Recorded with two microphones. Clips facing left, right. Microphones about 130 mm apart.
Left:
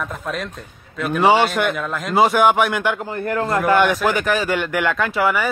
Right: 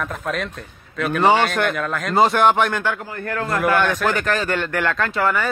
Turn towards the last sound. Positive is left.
turn(degrees=5)  # may be behind; listen again after turning